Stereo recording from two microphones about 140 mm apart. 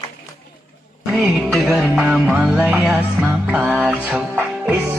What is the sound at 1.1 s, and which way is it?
Music, centre (ahead or behind).